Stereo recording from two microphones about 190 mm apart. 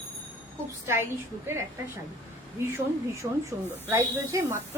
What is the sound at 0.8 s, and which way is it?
Speech, 15° right (ahead or behind).